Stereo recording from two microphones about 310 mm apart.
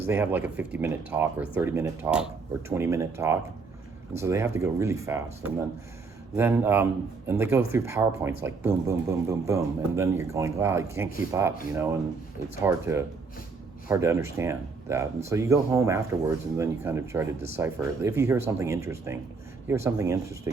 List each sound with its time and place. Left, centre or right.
0.1 s speech: centre
12.6 s speech: centre